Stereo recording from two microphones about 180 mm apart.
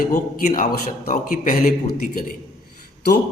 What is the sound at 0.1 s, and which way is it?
Speech, 45° left (ahead or behind).